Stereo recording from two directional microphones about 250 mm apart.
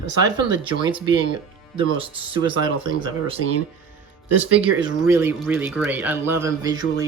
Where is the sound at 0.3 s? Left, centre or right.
Centre.